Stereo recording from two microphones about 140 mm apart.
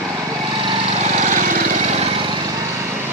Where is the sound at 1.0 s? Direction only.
65° right (ahead or behind).